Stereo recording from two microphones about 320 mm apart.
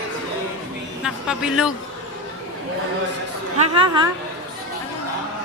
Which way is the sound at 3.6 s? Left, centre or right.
Centre.